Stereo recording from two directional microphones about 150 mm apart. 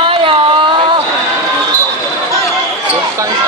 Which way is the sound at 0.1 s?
35° right (ahead or behind).